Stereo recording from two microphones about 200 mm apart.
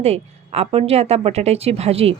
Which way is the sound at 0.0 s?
30° right (ahead or behind).